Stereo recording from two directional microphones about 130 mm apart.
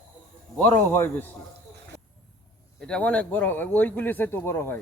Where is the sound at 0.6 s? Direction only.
15° left (ahead or behind).